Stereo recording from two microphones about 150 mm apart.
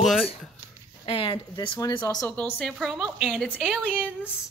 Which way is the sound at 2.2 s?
10° left (ahead or behind).